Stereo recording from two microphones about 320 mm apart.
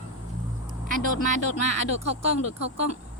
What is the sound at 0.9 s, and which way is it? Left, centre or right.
Speech, right.